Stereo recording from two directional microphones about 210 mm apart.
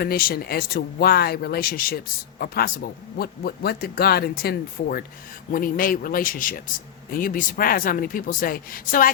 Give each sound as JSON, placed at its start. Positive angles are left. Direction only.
{"t": 0.0, "sound": "speech", "side_deg": 45}